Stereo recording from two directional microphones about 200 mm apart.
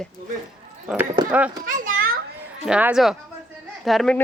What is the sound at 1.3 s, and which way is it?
Speech, 5° right (ahead or behind).